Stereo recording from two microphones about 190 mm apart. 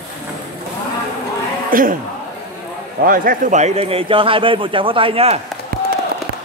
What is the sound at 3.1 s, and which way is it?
A man's voice, 45° right (ahead or behind).